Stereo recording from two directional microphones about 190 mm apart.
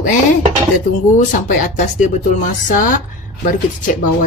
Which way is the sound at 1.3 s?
40° left (ahead or behind).